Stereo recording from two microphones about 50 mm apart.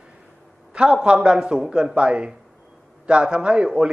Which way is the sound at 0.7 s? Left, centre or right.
Centre.